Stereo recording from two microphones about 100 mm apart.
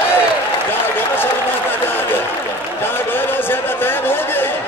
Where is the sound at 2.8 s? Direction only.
20° left (ahead or behind).